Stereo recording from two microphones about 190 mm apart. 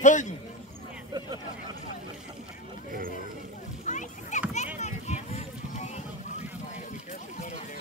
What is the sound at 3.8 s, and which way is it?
Rowboat, 40° left (ahead or behind).